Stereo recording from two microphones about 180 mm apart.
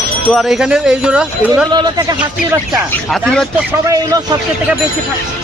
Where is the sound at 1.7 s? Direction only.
20° right (ahead or behind).